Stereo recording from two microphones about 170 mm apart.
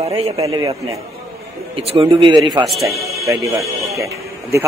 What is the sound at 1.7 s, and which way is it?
Speech, 35° right (ahead or behind).